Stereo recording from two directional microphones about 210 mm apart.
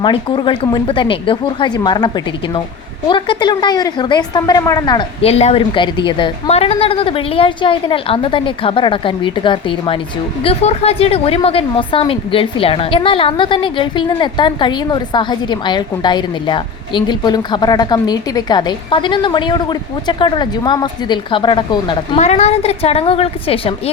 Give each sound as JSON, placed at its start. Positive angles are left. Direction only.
{"t": 0.0, "sound": "a woman's voice", "side_deg": 25}